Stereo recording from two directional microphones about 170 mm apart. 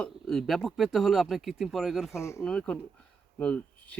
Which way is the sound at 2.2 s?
15° left (ahead or behind).